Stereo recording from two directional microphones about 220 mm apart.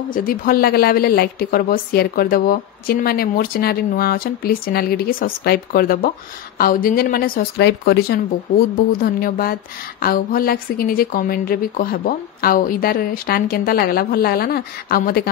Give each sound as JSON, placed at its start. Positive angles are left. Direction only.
{"t": 0.1, "sound": "speech", "side_deg": 40}